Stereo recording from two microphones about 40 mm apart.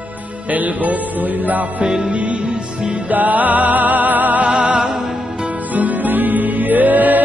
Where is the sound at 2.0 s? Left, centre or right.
Right.